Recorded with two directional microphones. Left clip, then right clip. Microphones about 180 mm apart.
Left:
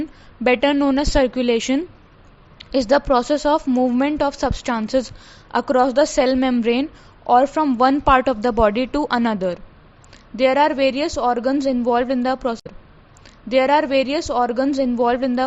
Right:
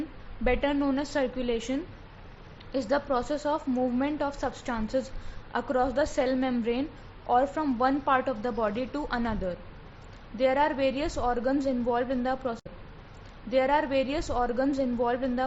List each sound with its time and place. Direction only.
0.4 s a woman's voice: 55° left (ahead or behind)